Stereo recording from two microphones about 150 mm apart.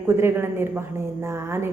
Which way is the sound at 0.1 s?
15° right (ahead or behind).